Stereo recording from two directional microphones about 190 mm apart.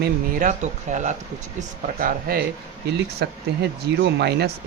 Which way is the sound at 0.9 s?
40° right (ahead or behind).